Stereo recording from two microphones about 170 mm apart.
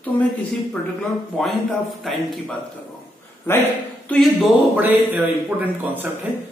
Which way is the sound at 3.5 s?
15° left (ahead or behind).